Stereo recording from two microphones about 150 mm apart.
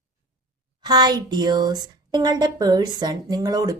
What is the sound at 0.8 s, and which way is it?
Speech, 30° right (ahead or behind).